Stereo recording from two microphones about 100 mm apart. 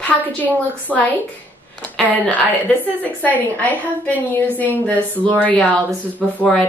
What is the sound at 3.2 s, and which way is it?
A woman's voice, 15° left (ahead or behind).